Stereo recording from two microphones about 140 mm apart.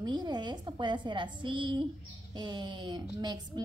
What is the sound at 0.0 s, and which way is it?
A woman's voice, 30° right (ahead or behind).